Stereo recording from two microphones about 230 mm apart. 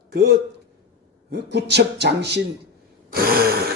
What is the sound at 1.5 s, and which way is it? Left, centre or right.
Speech, right.